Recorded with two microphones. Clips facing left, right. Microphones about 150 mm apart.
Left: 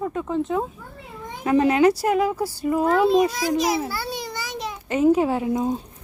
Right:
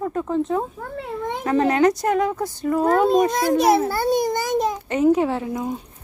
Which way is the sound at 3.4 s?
55° right (ahead or behind).